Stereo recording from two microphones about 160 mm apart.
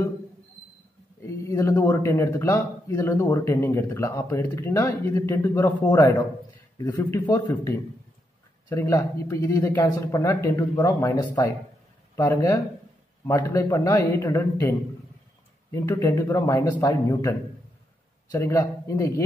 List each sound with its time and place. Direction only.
1.2 s a man's voice: 20° left (ahead or behind)
7.2 s speech: 20° left (ahead or behind)
8.6 s speech: 20° left (ahead or behind)